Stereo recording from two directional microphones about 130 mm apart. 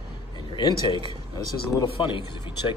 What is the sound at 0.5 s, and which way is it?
Speech, 40° left (ahead or behind).